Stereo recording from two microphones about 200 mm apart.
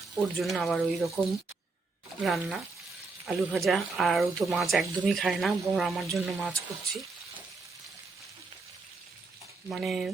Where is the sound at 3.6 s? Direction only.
Centre (ahead or behind).